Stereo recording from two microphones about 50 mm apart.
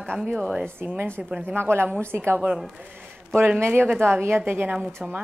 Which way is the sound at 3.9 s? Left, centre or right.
Right.